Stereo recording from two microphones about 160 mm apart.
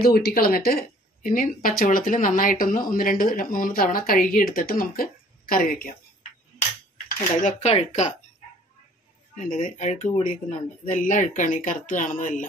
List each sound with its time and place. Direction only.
0.0 s a woman's voice: 75° left (ahead or behind)
7.6 s speech: 45° left (ahead or behind)
9.4 s a woman's voice: 55° left (ahead or behind)